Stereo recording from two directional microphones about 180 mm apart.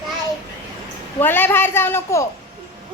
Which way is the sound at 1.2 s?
10° left (ahead or behind).